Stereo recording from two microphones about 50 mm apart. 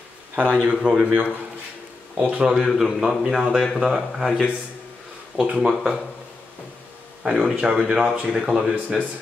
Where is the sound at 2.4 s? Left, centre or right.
Centre.